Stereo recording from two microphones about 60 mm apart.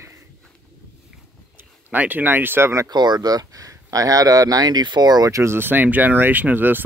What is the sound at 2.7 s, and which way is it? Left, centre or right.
Speech, right.